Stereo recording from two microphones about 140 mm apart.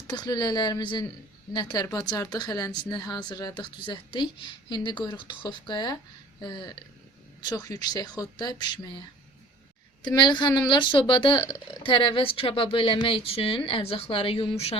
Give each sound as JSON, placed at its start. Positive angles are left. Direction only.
{"t": 0.1, "sound": "speech", "side_deg": 30}
{"t": 10.0, "sound": "speech", "side_deg": 30}